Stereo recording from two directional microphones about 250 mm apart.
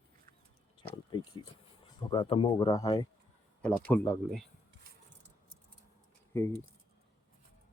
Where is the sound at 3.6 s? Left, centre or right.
Centre.